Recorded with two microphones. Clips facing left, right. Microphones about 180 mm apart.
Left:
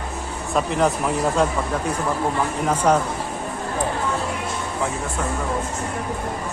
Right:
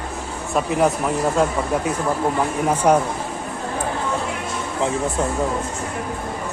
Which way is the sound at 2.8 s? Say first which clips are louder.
Right 2 dB; 15° right (ahead or behind).